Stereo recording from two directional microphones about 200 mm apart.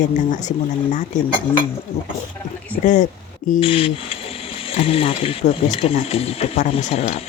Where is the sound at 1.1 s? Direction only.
40° left (ahead or behind).